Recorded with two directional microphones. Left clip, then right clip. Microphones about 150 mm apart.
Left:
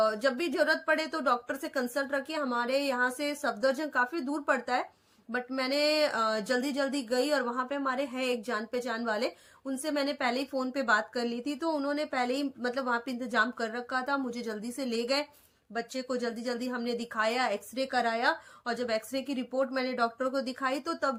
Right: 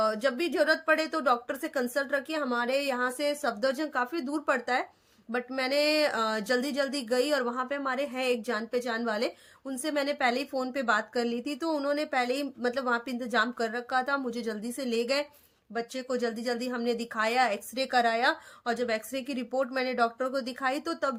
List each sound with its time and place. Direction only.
0.0 s speech: 30° right (ahead or behind)